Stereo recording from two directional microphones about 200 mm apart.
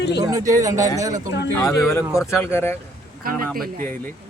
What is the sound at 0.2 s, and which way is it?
Speech, 20° right (ahead or behind).